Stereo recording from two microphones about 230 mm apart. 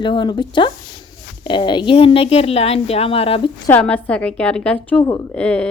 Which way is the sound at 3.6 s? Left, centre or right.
Centre.